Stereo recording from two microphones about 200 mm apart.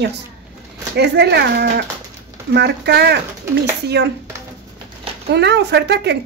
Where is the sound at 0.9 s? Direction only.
55° right (ahead or behind).